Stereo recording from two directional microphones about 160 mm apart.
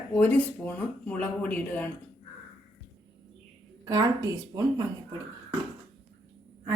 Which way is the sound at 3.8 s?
20° right (ahead or behind).